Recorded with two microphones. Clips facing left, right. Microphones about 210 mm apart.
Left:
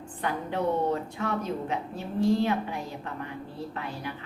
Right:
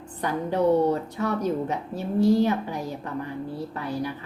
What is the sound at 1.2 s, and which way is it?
A woman's voice, 40° right (ahead or behind).